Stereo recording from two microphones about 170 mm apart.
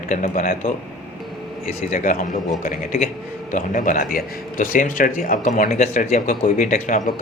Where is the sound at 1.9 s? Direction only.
50° left (ahead or behind).